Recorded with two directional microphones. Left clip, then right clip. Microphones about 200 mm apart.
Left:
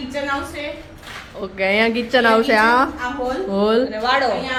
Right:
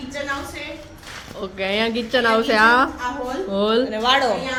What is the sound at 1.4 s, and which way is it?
Speech, centre (ahead or behind).